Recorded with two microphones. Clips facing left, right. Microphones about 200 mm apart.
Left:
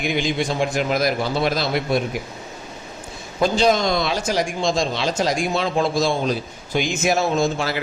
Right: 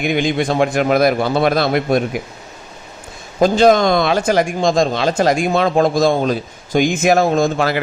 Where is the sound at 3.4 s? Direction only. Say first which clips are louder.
Right 6 dB; 50° right (ahead or behind).